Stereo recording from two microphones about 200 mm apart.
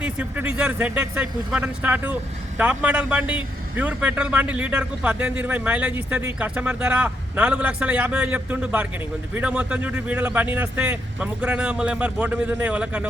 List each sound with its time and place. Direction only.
0.0 s a man's voice: 5° right (ahead or behind)